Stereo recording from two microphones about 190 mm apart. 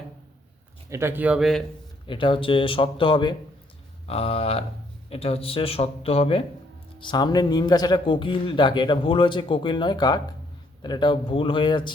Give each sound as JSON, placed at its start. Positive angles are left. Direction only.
{"t": 0.9, "sound": "speech", "side_deg": -15}
{"t": 2.0, "sound": "speech", "side_deg": 25}